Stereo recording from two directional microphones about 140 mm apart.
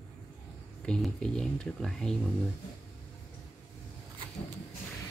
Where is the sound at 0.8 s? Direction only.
5° left (ahead or behind).